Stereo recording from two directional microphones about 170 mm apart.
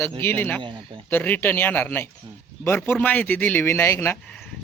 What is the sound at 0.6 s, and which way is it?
Speech, 30° right (ahead or behind).